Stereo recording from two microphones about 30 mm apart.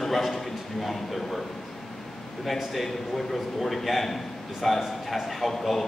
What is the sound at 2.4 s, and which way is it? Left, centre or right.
A man's voice, centre.